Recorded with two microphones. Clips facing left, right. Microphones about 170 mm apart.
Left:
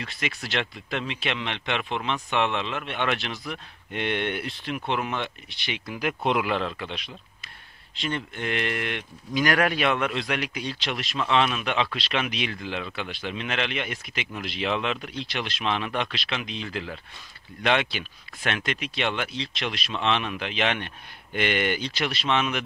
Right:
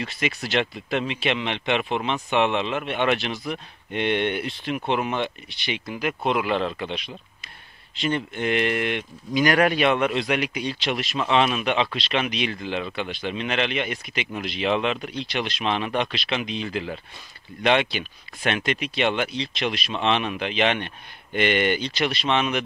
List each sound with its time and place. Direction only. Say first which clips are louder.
0.0 s speech: right 5 dB; 5° right (ahead or behind)
2.1 s speech: right 4 dB; 20° right (ahead or behind); by 22.6 s centre (ahead or behind)